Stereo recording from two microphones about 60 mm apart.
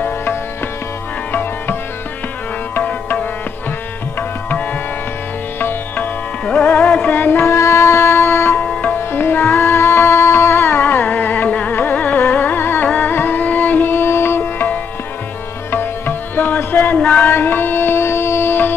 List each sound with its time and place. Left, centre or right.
0.0 s music: left
5.6 s music: left
6.4 s music: centre
7.5 s music: left
17.0 s a sound: left
17.3 s music: left